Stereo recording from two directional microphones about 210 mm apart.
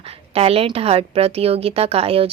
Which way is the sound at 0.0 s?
30° right (ahead or behind).